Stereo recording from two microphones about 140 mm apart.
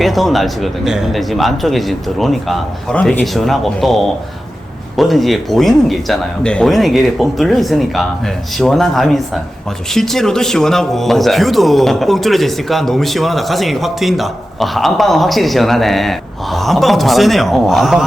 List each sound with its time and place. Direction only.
0.0 s speech: centre (ahead or behind)